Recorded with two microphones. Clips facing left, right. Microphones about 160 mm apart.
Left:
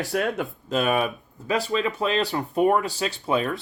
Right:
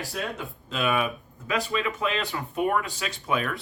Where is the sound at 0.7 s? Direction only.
40° left (ahead or behind).